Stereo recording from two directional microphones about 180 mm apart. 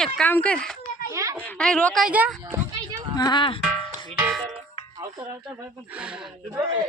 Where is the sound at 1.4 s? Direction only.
5° left (ahead or behind).